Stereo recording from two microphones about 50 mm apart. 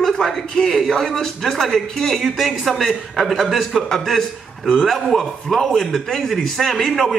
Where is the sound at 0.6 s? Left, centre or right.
Centre.